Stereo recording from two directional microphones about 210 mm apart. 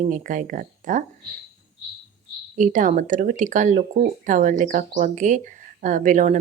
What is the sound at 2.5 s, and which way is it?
Speech, 35° right (ahead or behind).